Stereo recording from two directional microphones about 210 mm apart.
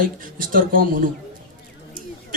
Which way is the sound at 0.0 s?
40° right (ahead or behind).